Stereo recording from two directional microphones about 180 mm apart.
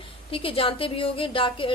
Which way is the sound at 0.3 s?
30° left (ahead or behind).